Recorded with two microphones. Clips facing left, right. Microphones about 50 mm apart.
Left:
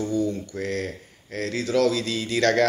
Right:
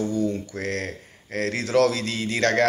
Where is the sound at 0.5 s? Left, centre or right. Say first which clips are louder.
Even; right.